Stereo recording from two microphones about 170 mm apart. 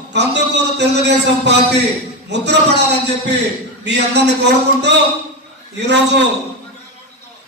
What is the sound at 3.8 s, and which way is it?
A man's voice, 90° right.